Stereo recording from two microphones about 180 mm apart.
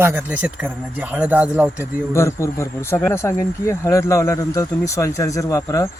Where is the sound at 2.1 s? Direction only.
15° left (ahead or behind).